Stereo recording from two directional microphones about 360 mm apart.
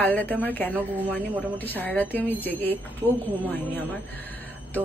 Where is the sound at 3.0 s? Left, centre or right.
Centre.